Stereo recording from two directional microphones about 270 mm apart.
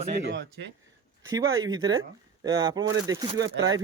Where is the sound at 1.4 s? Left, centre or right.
Right.